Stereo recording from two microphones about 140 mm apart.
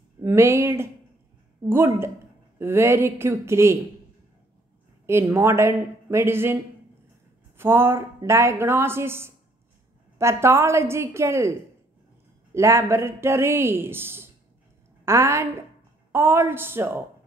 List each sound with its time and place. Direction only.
0.2 s speech: 15° right (ahead or behind)
2.6 s a woman's voice: 20° right (ahead or behind)
5.0 s a woman's voice: 20° right (ahead or behind)
12.5 s a woman's voice: 20° right (ahead or behind)